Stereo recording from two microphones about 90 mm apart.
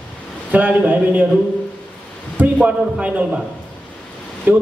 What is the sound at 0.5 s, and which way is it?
Speech, 20° right (ahead or behind).